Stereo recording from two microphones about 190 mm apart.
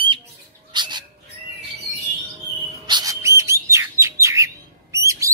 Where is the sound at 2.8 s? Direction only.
20° right (ahead or behind).